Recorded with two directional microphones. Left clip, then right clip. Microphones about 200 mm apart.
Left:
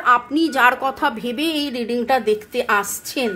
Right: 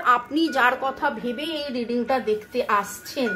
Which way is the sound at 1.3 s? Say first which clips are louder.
Left 6 dB; 45° left (ahead or behind).